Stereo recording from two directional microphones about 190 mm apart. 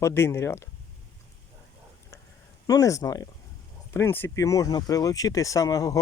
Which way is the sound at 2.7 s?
15° left (ahead or behind).